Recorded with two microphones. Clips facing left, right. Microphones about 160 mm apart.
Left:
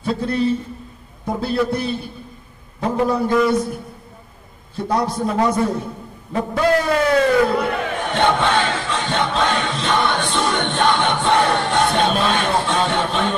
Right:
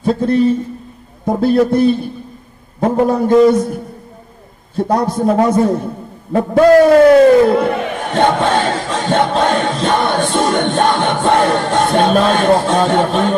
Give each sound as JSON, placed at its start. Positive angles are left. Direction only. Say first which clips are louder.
{"t": 0.0, "sound": "a man's voice", "louder": "right 7 dB", "side_deg": -45}
{"t": 4.7, "sound": "a man's voice", "louder": "right 5 dB", "side_deg": -50}